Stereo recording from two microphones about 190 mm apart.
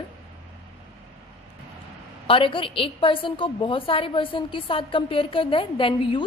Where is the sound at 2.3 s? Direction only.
30° left (ahead or behind).